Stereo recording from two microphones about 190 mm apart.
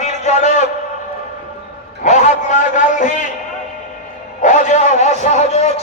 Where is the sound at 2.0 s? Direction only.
40° left (ahead or behind).